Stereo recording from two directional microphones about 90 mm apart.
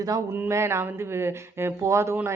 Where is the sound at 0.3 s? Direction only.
30° right (ahead or behind).